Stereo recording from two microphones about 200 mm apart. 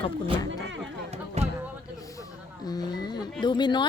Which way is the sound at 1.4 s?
30° right (ahead or behind).